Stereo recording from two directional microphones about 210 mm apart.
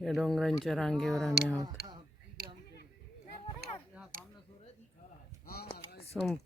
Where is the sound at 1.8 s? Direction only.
45° right (ahead or behind).